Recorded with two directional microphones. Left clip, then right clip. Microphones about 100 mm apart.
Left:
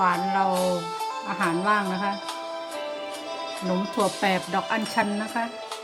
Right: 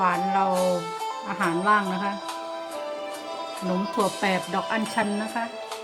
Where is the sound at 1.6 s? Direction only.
25° left (ahead or behind).